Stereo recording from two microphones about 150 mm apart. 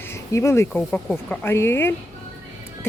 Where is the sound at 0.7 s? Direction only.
10° left (ahead or behind).